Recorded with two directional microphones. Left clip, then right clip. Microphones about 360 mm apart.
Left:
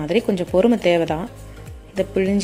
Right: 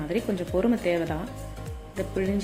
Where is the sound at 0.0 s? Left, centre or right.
Left.